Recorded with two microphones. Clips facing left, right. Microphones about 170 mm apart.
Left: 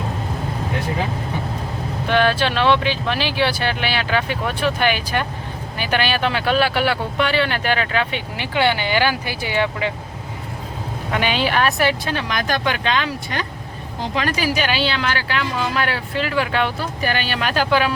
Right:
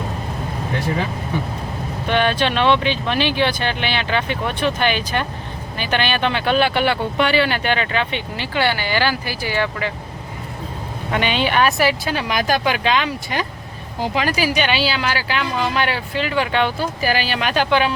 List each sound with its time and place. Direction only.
2.0 s speech: 5° left (ahead or behind)
8.4 s speech: 20° left (ahead or behind)
11.1 s speech: 5° left (ahead or behind)